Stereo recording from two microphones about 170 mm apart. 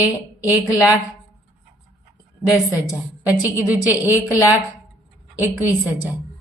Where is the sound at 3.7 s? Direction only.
10° right (ahead or behind).